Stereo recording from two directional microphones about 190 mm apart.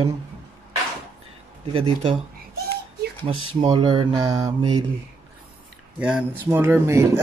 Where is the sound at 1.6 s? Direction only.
30° right (ahead or behind).